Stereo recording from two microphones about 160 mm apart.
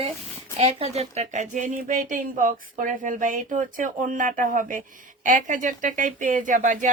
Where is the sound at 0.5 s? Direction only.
40° right (ahead or behind).